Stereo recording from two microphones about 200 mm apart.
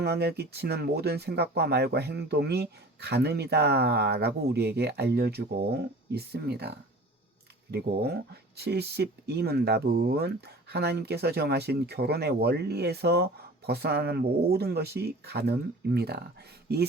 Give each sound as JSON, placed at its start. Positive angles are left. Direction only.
{"t": 0.0, "sound": "speech", "side_deg": -55}